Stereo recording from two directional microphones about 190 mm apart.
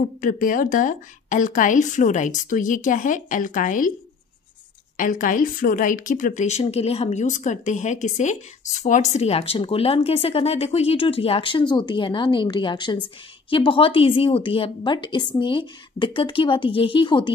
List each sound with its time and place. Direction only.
0.2 s a woman's voice: 45° left (ahead or behind)
4.9 s a woman's voice: 45° left (ahead or behind); by 17.3 s 25° left (ahead or behind)